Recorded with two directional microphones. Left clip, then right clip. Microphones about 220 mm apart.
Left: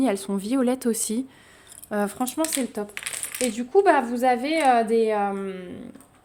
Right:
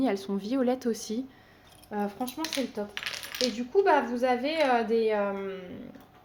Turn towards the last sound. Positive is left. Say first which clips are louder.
# left 4 dB
turn(degrees=50)  # may be behind; listen again after turning